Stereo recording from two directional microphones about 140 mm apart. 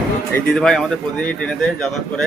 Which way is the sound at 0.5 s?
5° left (ahead or behind).